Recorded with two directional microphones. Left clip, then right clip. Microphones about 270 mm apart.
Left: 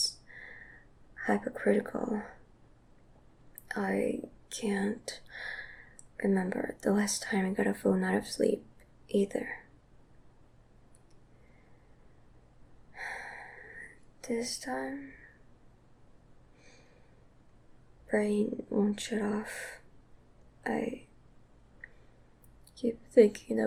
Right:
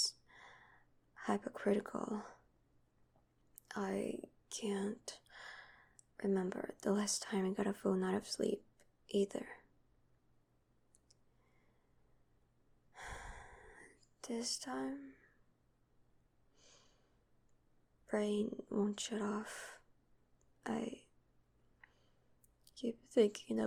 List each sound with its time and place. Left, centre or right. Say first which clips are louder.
0.0 s a sound: left 6 dB; right
1.2 s speech: left 8 dB; right
3.7 s speech: left 9 dB; right
12.9 s a sound: left 10 dB; right
14.2 s speech: left 8 dB; right
18.1 s speech: left 8 dB; right
22.7 s a woman's voice: left 11 dB; right